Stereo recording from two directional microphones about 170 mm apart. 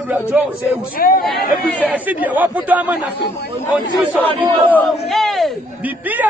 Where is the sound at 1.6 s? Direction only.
10° left (ahead or behind).